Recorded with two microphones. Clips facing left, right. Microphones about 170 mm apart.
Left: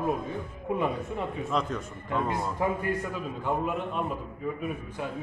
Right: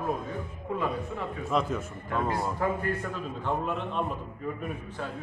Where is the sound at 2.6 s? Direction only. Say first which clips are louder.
Left 1 dB; 15° left (ahead or behind).